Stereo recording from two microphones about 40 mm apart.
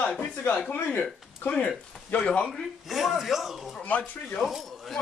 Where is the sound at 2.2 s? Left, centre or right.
Left.